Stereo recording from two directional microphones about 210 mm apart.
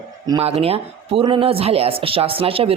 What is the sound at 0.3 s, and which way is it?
Speech, 30° right (ahead or behind).